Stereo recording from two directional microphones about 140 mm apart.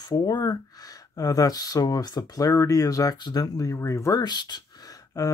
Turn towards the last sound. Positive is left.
turn(degrees=25)  # may be behind; listen again after turning